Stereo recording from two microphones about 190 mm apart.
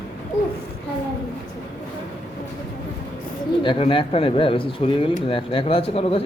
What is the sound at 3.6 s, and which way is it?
Speech, 25° left (ahead or behind).